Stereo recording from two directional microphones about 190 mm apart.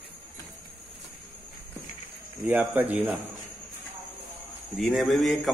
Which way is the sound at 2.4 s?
10° right (ahead or behind).